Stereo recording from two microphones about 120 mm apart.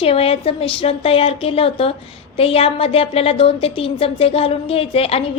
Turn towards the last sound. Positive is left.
turn(degrees=55)  # may be behind; listen again after turning